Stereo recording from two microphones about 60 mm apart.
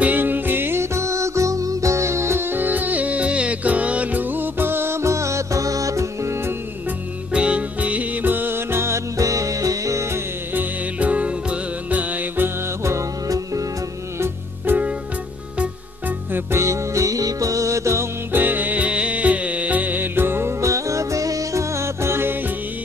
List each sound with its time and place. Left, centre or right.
0.0 s music: right
2.5 s music: right
7.3 s music: right
9.2 s music: right
10.5 s music: right
14.7 s music: right
16.3 s music: right
18.3 s music: right
20.6 s music: right